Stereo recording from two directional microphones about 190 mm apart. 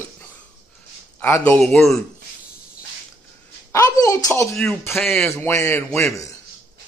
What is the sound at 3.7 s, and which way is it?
Speech, 15° left (ahead or behind).